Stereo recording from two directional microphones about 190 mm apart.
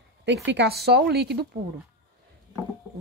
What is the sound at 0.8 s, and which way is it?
Speech, 60° right (ahead or behind).